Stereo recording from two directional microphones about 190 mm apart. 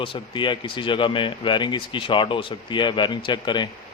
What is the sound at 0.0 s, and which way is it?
A man's voice, 25° left (ahead or behind).